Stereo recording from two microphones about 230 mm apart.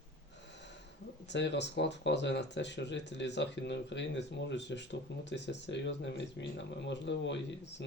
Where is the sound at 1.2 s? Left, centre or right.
Left.